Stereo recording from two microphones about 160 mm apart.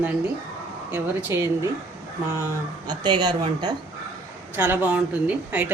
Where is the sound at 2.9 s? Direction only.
25° right (ahead or behind).